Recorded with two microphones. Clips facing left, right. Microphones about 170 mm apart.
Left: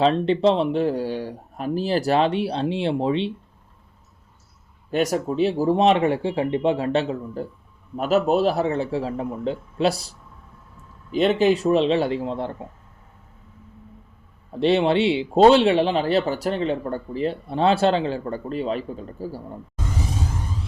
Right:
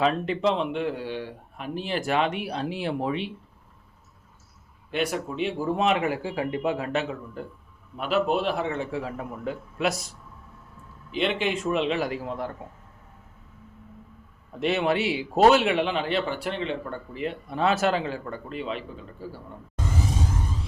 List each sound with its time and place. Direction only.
0.0 s speech: 30° left (ahead or behind)
4.9 s speech: 40° left (ahead or behind)
14.5 s speech: 30° left (ahead or behind)